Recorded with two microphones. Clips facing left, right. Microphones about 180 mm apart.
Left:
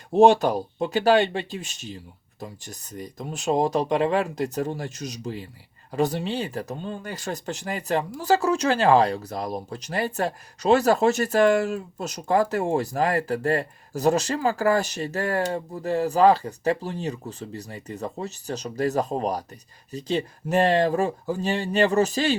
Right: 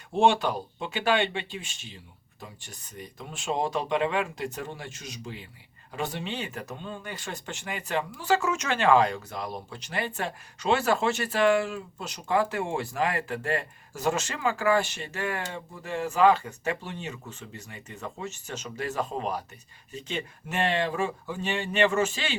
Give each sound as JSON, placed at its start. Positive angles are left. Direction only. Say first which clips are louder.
{"t": 0.1, "sound": "speech", "louder": "left 7 dB", "side_deg": 40}